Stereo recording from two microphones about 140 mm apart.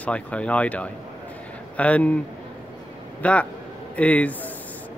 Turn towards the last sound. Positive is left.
turn(degrees=10)  # may be behind; listen again after turning